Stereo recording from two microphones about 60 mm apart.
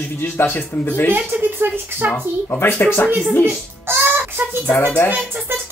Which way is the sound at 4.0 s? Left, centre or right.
Right.